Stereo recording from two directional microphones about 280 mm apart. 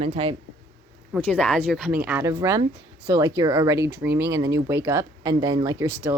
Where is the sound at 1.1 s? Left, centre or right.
Centre.